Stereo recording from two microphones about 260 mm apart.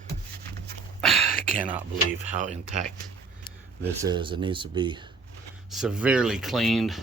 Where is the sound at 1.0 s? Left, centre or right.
Centre.